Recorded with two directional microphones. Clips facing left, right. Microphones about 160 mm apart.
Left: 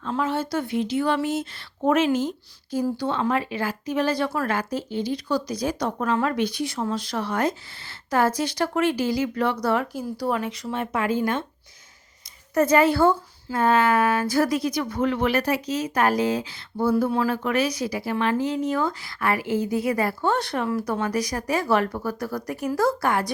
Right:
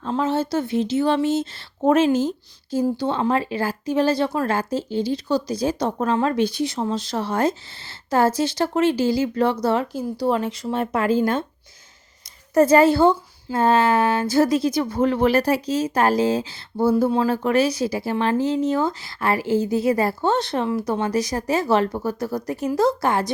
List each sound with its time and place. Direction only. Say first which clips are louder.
0.0 s speech: right 3 dB; 30° right (ahead or behind)
12.5 s speech: right 4 dB; 30° right (ahead or behind)